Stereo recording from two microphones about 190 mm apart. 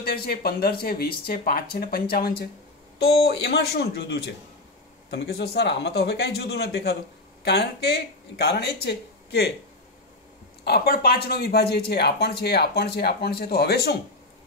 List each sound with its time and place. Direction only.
0.0 s speech: 55° left (ahead or behind)
10.6 s speech: 55° left (ahead or behind)